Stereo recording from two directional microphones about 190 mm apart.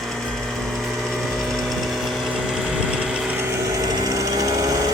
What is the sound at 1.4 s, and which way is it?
Engine, centre (ahead or behind).